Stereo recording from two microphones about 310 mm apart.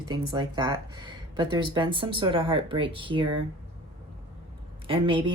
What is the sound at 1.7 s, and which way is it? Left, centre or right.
Speech, centre.